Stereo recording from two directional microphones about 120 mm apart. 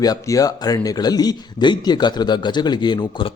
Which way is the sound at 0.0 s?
30° left (ahead or behind).